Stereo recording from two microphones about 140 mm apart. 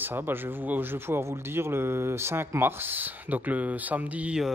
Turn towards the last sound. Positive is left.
turn(degrees=-10)  # may be behind; listen again after turning